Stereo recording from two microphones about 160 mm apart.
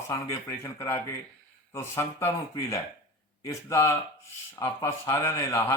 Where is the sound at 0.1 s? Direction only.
20° left (ahead or behind).